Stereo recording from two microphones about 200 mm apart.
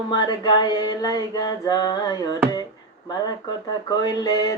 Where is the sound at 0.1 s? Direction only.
20° left (ahead or behind).